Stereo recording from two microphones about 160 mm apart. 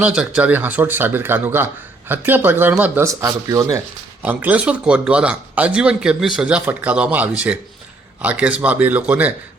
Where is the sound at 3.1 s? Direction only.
20° right (ahead or behind).